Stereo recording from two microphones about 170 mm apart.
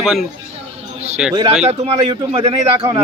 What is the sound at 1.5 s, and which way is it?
A man's voice, 35° right (ahead or behind).